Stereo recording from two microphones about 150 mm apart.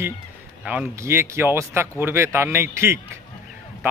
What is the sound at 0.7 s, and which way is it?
Speech, 15° right (ahead or behind).